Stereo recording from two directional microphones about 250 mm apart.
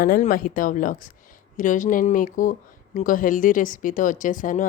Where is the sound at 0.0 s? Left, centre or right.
Left.